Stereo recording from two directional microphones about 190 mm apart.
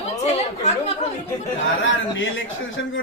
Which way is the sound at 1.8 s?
85° left.